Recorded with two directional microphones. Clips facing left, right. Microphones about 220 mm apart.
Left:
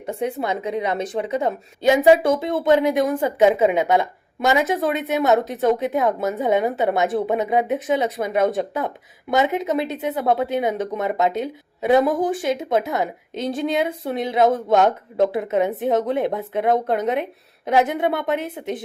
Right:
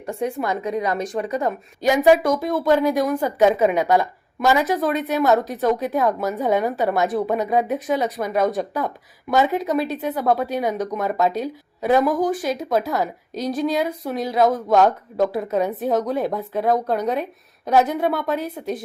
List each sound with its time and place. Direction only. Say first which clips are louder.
0.0 s a woman's voice: even; 20° left (ahead or behind)